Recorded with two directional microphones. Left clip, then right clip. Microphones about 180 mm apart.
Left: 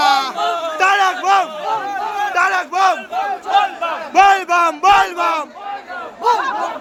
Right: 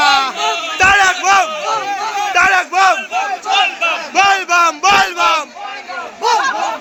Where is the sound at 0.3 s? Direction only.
15° right (ahead or behind).